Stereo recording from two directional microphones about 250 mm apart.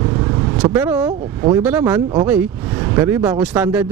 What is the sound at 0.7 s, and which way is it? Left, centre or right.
Speech, centre.